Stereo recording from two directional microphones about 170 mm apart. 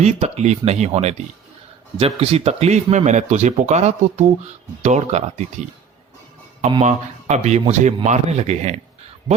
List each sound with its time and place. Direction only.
0.0 s speech: 40° right (ahead or behind)
6.8 s speech: 45° right (ahead or behind)